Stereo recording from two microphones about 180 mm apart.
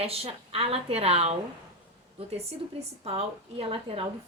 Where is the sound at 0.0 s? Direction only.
35° right (ahead or behind).